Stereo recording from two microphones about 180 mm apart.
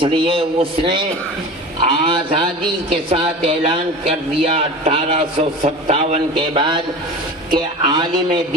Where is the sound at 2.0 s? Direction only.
30° right (ahead or behind).